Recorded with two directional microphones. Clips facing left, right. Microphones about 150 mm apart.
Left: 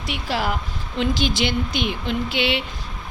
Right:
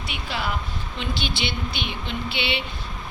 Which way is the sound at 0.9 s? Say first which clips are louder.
Left 8 dB; 90° left.